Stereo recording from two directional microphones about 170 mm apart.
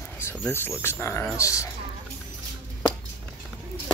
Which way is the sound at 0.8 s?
15° left (ahead or behind).